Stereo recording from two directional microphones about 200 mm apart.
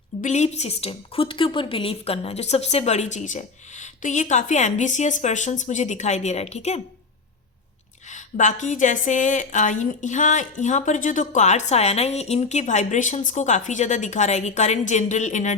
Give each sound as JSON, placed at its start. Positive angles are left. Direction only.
{"t": 0.2, "sound": "a woman's voice", "side_deg": 35}
{"t": 8.1, "sound": "a woman's voice", "side_deg": 35}